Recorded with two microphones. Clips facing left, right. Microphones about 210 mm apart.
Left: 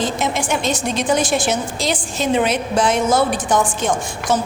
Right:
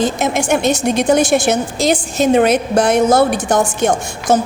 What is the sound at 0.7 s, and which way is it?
Speech, 65° right (ahead or behind).